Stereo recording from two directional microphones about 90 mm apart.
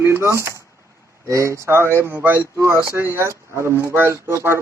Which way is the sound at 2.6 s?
30° right (ahead or behind).